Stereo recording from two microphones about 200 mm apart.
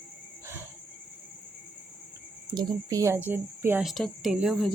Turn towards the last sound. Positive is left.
turn(degrees=-5)  # may be behind; listen again after turning